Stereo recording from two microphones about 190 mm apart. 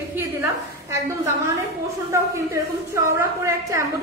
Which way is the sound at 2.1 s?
15° right (ahead or behind).